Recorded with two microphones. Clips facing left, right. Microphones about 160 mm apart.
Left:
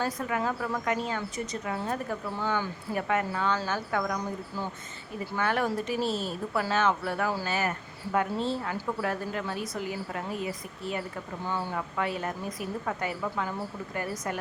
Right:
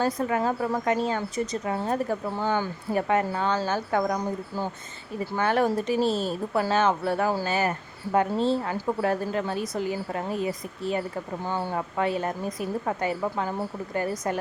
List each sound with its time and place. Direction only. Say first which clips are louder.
0.0 s speech: right 5 dB; 35° right (ahead or behind)
5.4 s speech: right 5 dB; 30° right (ahead or behind)